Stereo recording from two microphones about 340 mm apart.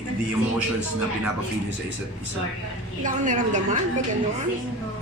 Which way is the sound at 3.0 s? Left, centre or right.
Right.